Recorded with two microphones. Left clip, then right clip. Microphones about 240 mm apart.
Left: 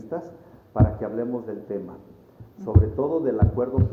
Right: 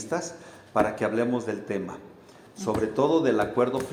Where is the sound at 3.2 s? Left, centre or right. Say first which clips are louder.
Right 2 dB; right.